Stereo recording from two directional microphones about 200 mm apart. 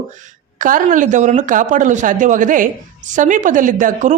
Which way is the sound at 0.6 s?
40° right (ahead or behind).